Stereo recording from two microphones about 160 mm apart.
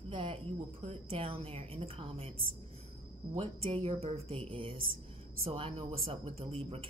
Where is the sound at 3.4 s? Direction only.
35° right (ahead or behind).